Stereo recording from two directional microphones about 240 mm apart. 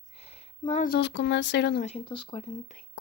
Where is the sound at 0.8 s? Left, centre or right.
Left.